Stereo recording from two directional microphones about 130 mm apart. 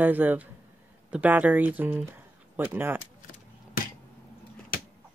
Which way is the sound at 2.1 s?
15° right (ahead or behind).